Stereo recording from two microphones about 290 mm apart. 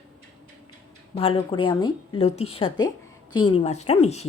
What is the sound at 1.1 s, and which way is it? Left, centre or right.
A woman's voice, centre.